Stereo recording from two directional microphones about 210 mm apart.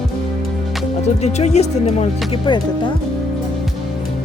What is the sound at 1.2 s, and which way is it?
Speech, 30° left (ahead or behind).